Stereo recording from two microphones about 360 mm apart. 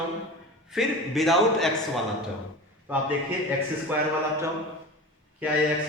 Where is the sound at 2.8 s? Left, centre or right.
Centre.